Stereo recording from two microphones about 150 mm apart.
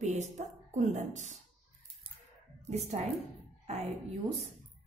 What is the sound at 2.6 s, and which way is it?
A woman's voice, 50° right (ahead or behind).